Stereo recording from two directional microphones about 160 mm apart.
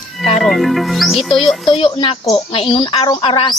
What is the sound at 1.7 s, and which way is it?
A woman's voice, 35° left (ahead or behind).